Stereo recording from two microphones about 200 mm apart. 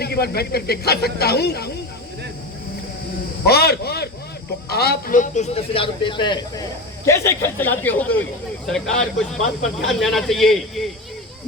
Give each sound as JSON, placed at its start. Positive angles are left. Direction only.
{"t": 0.0, "sound": "speech", "side_deg": 50}
{"t": 3.4, "sound": "a man's voice", "side_deg": 50}